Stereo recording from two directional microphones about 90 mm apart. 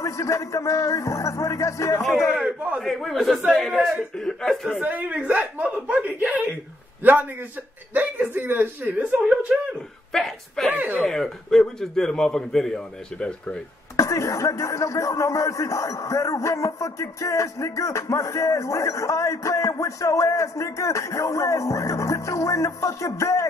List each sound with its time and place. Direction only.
0.0 s speech: 40° left (ahead or behind)
2.0 s a man's voice: centre (ahead or behind)
2.3 s speech: 15° right (ahead or behind)
2.8 s a man's voice: centre (ahead or behind)
4.7 s a man's voice: 20° right (ahead or behind)
10.1 s a man's voice: 5° left (ahead or behind)
10.7 s speech: 20° right (ahead or behind)
11.0 s a man's voice: 5° left (ahead or behind)
13.9 s speech: 35° left (ahead or behind)